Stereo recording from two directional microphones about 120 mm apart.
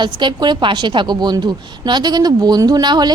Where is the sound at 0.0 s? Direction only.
40° right (ahead or behind).